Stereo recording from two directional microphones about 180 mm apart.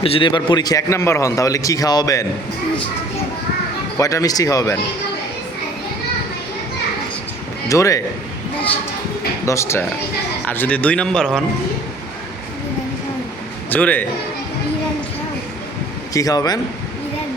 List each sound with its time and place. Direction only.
0.0 s a man's voice: 30° left (ahead or behind)
3.9 s a man's voice: 20° left (ahead or behind)
7.7 s speech: 15° left (ahead or behind)
9.5 s speech: 15° left (ahead or behind)
13.7 s a man's voice: 10° left (ahead or behind)
16.1 s a man's voice: 20° left (ahead or behind)